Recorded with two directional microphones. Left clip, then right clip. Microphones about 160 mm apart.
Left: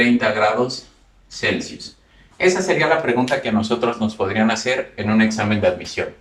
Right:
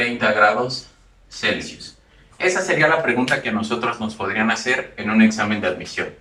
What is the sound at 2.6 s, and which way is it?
Speech, 35° left (ahead or behind).